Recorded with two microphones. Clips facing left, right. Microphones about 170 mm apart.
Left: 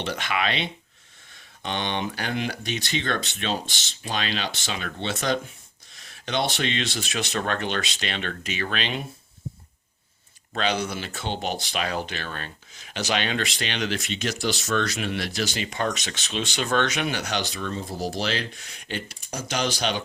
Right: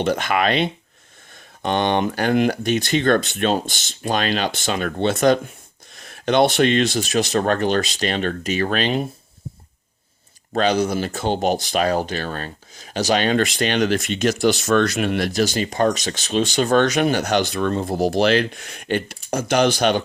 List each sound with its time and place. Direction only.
0.0 s speech: 45° right (ahead or behind)
10.5 s speech: 40° right (ahead or behind)